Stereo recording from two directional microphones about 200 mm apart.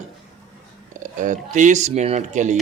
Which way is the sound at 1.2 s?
40° right (ahead or behind).